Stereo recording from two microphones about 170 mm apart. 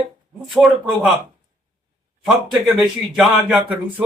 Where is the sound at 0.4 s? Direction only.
Centre (ahead or behind).